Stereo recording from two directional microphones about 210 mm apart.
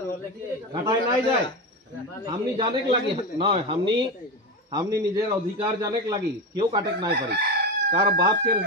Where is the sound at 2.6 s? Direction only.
25° right (ahead or behind).